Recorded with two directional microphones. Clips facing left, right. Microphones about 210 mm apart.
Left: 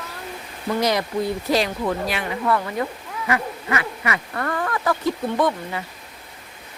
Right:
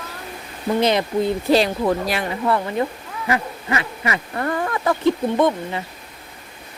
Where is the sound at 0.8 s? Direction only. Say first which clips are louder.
Right 3 dB; 25° right (ahead or behind).